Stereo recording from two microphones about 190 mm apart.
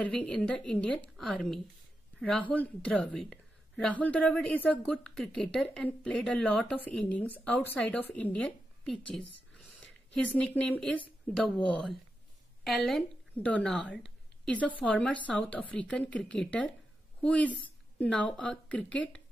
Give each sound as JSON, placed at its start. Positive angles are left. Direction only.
{"t": 0.0, "sound": "a woman's voice", "side_deg": 5}